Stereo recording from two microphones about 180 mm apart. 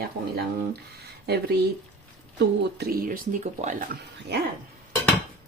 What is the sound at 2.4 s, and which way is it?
Speech, 60° right (ahead or behind).